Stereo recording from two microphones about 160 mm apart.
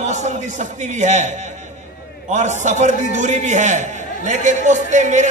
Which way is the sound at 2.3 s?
45° right (ahead or behind).